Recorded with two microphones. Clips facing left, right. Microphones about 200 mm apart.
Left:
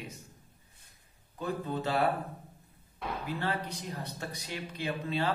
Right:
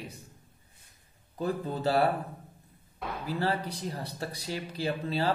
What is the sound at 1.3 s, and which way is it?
Speech, 35° right (ahead or behind).